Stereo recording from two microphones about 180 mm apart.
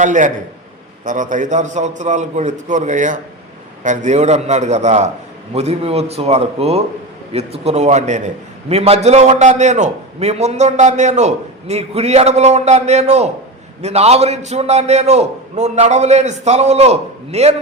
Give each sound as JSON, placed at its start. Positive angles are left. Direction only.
{"t": 0.0, "sound": "a man's voice", "side_deg": -45}